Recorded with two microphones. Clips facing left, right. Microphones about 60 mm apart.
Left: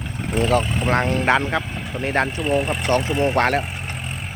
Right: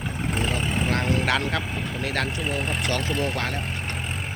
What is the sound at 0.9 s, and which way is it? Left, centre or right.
Speech, left.